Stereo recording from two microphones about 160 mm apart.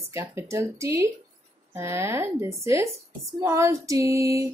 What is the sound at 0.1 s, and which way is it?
Speech, 15° right (ahead or behind).